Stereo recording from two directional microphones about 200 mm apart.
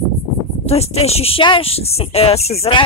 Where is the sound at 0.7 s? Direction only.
30° left (ahead or behind).